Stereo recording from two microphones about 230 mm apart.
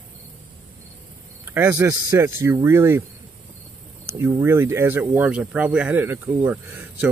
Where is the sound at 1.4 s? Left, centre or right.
Centre.